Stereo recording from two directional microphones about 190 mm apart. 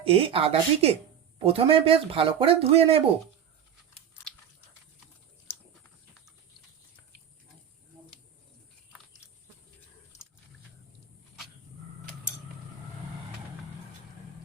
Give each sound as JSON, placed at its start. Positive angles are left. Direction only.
{"t": 0.0, "sound": "speech", "side_deg": -30}